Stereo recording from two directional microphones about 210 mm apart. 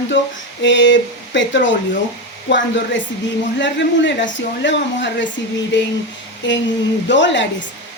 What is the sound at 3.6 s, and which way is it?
Speech, 60° left (ahead or behind).